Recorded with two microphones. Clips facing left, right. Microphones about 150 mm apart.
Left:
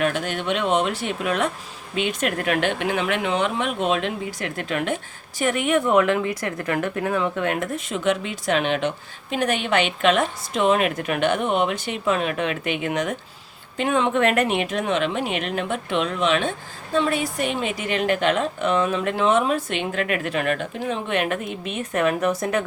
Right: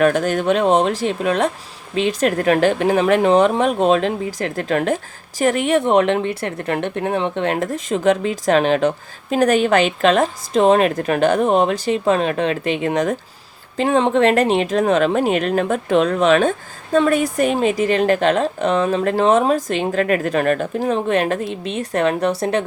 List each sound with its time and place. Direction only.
0.0 s speech: 40° right (ahead or behind)